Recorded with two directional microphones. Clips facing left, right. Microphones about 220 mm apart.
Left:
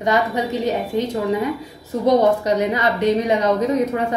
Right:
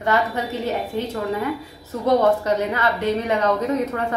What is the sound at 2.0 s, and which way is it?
A woman's voice, 15° left (ahead or behind).